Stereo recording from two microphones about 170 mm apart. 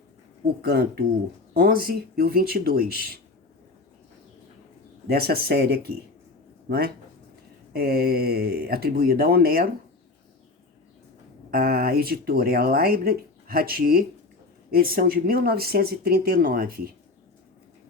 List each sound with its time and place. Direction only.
0.4 s speech: 65° right (ahead or behind)
5.0 s speech: 60° right (ahead or behind)
11.5 s speech: 60° right (ahead or behind)